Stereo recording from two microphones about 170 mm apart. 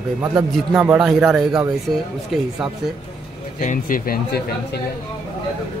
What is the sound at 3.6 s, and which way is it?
Speech, 50° left (ahead or behind).